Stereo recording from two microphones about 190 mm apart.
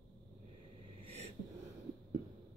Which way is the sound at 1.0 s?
30° right (ahead or behind).